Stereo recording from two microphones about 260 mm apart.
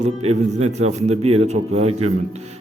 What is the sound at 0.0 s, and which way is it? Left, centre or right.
A man's voice, right.